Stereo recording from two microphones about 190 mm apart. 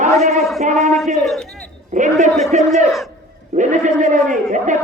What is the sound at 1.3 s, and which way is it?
Speech, 5° left (ahead or behind).